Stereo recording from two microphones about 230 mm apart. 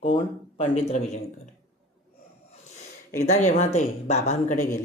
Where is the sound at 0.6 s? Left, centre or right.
Left.